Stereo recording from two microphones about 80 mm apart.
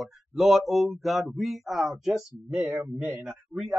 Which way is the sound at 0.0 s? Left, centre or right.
Centre.